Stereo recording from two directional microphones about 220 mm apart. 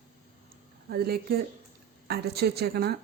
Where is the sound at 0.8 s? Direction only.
45° right (ahead or behind).